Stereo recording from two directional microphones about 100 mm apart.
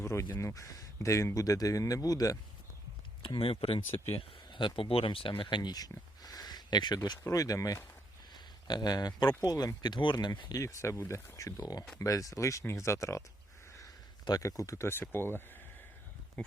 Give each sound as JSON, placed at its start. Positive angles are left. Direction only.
{"t": 0.0, "sound": "speech", "side_deg": 30}
{"t": 3.2, "sound": "speech", "side_deg": 70}
{"t": 4.5, "sound": "speech", "side_deg": 50}
{"t": 6.2, "sound": "a sound", "side_deg": 40}
{"t": 7.3, "sound": "speech", "side_deg": 35}
{"t": 10.6, "sound": "speech", "side_deg": 30}
{"t": 13.7, "sound": "a sound", "side_deg": 35}
{"t": 14.7, "sound": "speech", "side_deg": 25}